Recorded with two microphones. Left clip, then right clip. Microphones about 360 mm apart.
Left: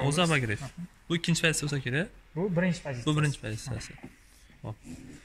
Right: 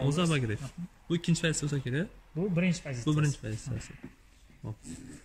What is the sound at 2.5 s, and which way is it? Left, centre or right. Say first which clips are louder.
Speech: left 3 dB; left.